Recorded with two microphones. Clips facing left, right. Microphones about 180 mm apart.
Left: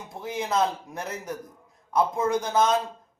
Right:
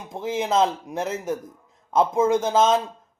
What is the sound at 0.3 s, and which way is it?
Speech, 20° right (ahead or behind).